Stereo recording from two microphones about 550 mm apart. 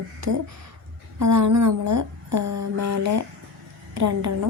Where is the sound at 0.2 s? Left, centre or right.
Right.